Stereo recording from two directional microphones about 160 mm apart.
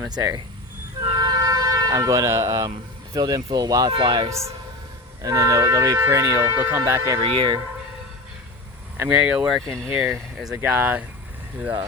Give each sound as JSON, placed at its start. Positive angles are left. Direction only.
{"t": 1.0, "sound": "speech", "side_deg": -25}
{"t": 9.0, "sound": "speech", "side_deg": -10}
{"t": 10.5, "sound": "speech", "side_deg": -15}